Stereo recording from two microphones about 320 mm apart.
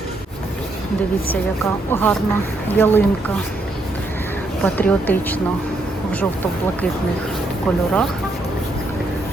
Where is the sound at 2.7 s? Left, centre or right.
Centre.